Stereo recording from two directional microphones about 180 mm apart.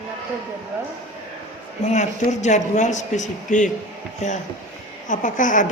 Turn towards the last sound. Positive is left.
turn(degrees=45)  # may be behind; listen again after turning